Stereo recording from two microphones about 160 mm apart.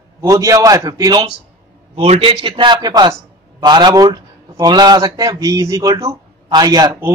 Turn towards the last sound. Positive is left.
turn(degrees=-25)  # may be behind; listen again after turning